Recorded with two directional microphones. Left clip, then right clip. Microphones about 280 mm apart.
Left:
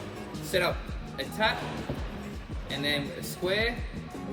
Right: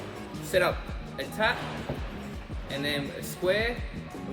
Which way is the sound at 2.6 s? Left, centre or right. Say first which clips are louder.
Left 1 dB; centre.